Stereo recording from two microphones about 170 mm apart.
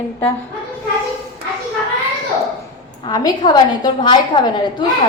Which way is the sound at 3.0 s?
25° left (ahead or behind).